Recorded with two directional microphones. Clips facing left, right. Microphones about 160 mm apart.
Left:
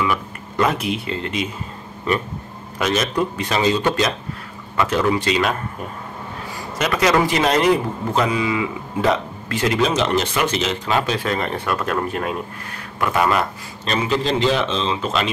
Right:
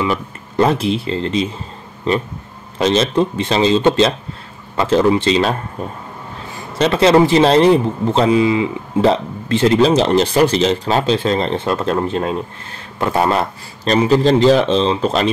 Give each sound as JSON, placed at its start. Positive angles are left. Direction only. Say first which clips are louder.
{"t": 0.0, "sound": "speech", "louder": "right 3 dB", "side_deg": -30}
{"t": 2.8, "sound": "a man's voice", "louder": "right 6 dB", "side_deg": -25}
{"t": 6.8, "sound": "a man's voice", "louder": "right 6 dB", "side_deg": -30}